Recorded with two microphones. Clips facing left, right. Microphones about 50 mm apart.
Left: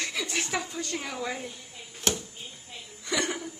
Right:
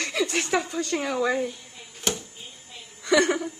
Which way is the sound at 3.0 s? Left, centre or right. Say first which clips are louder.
Right 9 dB; right.